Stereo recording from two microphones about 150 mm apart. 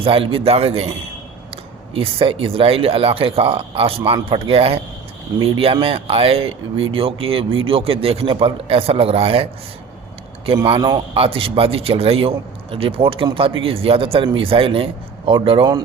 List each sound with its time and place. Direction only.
0.0 s speech: 40° right (ahead or behind)
10.7 s a man's voice: 25° right (ahead or behind)
11.1 s speech: 35° right (ahead or behind)